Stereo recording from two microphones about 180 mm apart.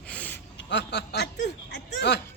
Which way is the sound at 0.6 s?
75° left (ahead or behind).